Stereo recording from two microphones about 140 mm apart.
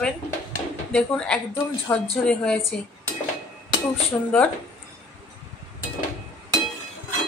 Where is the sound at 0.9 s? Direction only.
5° left (ahead or behind).